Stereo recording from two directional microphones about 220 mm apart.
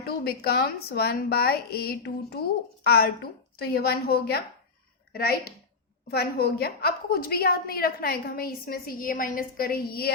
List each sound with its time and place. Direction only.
0.0 s a woman's voice: 45° left (ahead or behind)